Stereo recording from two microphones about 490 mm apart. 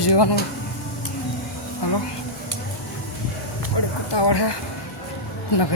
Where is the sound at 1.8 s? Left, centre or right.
Left.